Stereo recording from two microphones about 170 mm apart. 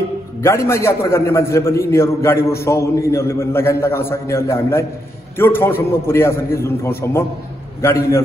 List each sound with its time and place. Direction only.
0.4 s a man's voice: 15° left (ahead or behind)